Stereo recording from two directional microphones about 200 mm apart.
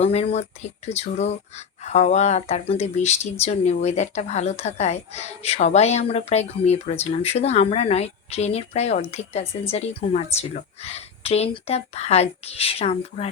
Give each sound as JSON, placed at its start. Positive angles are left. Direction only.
{"t": 0.0, "sound": "speech", "side_deg": 30}